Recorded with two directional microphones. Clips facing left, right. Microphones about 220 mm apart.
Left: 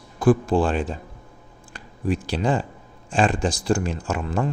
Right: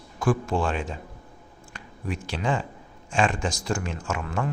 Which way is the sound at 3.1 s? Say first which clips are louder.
Left 4 dB; 35° left (ahead or behind).